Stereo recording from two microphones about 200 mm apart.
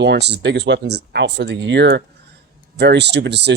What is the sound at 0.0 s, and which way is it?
Speech, 60° right (ahead or behind).